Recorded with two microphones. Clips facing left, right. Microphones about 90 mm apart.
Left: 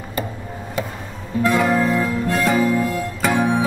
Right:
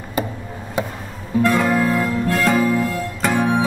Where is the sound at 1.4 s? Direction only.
10° left (ahead or behind).